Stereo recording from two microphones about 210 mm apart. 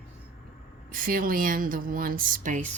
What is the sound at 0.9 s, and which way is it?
Speech, 40° right (ahead or behind).